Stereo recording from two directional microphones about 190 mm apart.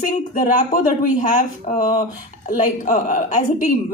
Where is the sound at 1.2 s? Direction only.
40° left (ahead or behind).